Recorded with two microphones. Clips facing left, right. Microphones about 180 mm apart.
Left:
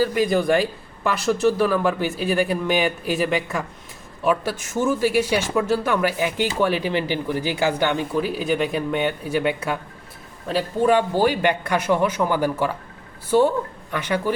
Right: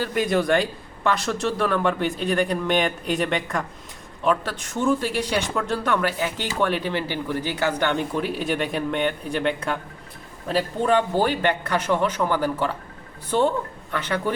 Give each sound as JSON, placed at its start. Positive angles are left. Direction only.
{"t": 0.0, "sound": "a man's voice", "side_deg": 0}